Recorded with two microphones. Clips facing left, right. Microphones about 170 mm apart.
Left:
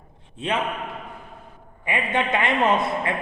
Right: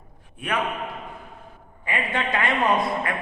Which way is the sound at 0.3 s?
25° left (ahead or behind).